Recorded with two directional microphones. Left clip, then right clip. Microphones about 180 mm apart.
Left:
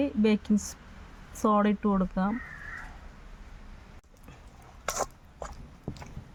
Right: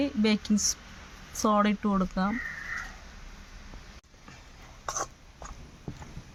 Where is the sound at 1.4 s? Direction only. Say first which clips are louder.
Even; 10° left (ahead or behind).